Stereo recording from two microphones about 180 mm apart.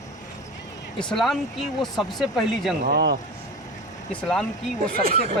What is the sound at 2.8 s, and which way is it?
Speech, 65° right (ahead or behind).